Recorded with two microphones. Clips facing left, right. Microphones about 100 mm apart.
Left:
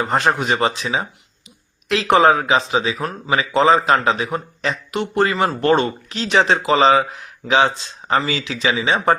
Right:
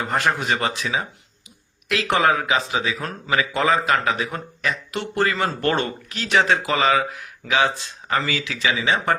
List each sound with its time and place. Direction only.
0.0 s speech: 20° left (ahead or behind)